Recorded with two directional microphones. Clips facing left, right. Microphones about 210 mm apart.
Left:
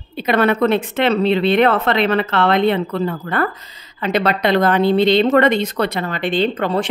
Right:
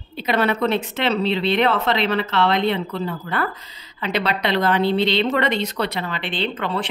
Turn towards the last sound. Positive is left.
turn(degrees=45)  # may be behind; listen again after turning